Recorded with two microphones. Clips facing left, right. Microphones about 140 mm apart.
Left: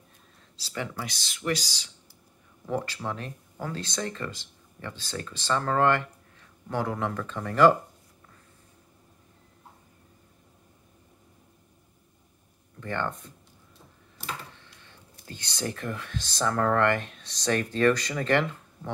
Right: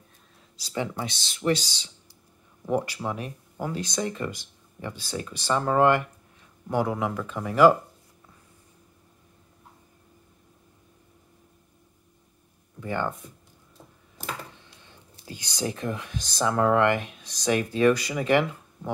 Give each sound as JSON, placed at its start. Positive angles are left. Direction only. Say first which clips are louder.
{"t": 0.6, "sound": "speech", "louder": "right 4 dB", "side_deg": -20}
{"t": 12.8, "sound": "speech", "louder": "right 2 dB", "side_deg": -10}
{"t": 14.6, "sound": "speech", "louder": "right 1 dB", "side_deg": -15}